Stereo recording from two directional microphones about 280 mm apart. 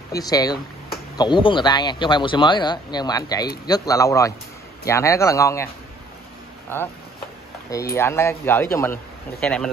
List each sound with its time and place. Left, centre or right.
0.1 s speech: centre
7.9 s speech: centre